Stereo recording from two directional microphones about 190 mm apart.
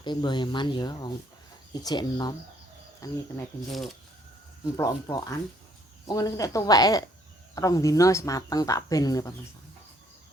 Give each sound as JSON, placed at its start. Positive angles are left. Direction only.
{"t": 0.0, "sound": "speech", "side_deg": 25}
{"t": 4.8, "sound": "speech", "side_deg": 20}